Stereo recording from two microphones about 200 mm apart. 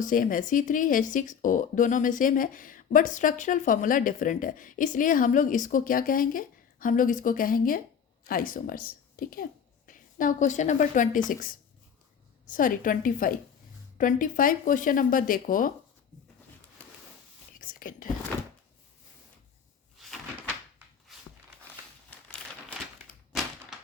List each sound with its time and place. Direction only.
0.0 s a woman's voice: 40° left (ahead or behind)
17.6 s whispering: 45° left (ahead or behind)
23.3 s a sound: centre (ahead or behind)